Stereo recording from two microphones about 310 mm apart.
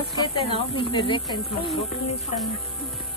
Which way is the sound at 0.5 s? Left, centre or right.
Centre.